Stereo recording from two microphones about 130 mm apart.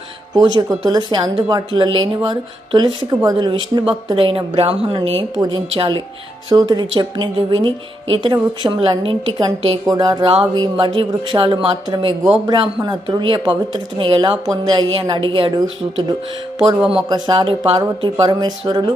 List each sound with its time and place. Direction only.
0.3 s a woman's voice: 30° right (ahead or behind); by 6.0 s 45° right (ahead or behind)
6.5 s a woman's voice: 30° right (ahead or behind)